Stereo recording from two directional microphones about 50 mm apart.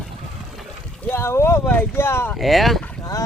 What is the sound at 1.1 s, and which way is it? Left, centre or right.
Boat, left.